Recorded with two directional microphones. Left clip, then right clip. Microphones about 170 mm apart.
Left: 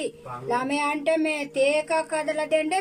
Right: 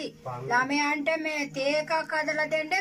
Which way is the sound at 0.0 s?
15° left (ahead or behind).